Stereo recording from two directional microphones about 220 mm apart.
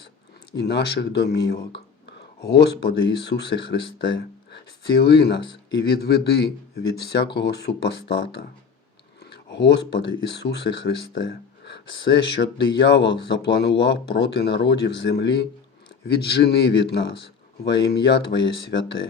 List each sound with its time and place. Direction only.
0.6 s speech: 50° left (ahead or behind)